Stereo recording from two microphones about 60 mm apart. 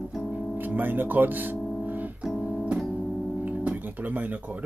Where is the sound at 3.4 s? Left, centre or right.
Right.